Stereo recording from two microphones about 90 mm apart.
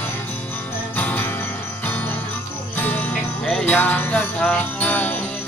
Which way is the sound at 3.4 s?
5° left (ahead or behind).